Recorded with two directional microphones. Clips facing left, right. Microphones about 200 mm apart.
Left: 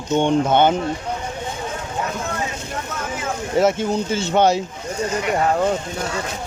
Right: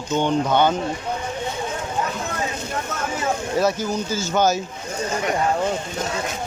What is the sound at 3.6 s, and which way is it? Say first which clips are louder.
Speech: left 5 dB; 25° left (ahead or behind).